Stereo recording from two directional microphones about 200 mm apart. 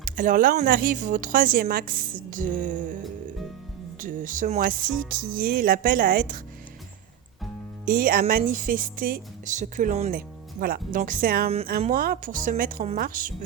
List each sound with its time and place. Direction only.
0.0 s speech: 40° right (ahead or behind)
4.0 s speech: 40° right (ahead or behind)
7.9 s speech: 45° right (ahead or behind)
10.1 s speech: 45° right (ahead or behind)